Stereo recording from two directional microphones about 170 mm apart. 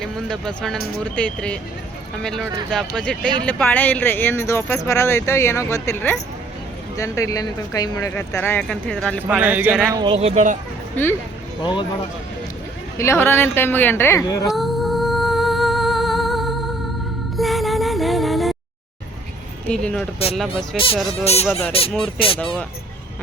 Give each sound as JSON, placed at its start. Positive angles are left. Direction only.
{"t": 0.0, "sound": "speech", "side_deg": 5}
{"t": 9.2, "sound": "speech", "side_deg": -10}
{"t": 9.9, "sound": "speech", "side_deg": -25}
{"t": 10.2, "sound": "speech", "side_deg": -40}
{"t": 11.6, "sound": "speech", "side_deg": 25}
{"t": 13.0, "sound": "speech", "side_deg": 15}
{"t": 14.5, "sound": "music", "side_deg": 0}
{"t": 19.6, "sound": "speech", "side_deg": 5}
{"t": 20.7, "sound": "speech", "side_deg": 30}